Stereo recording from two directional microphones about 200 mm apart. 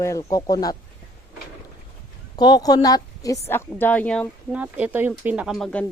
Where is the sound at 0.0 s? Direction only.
15° left (ahead or behind).